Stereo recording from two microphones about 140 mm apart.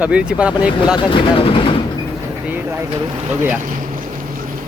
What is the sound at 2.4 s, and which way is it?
Speech, 15° right (ahead or behind).